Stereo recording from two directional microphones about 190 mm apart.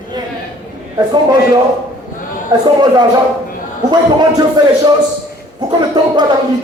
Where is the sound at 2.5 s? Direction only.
20° right (ahead or behind).